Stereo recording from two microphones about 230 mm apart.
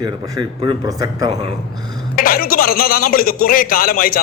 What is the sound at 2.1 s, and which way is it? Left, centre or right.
A man's voice, left.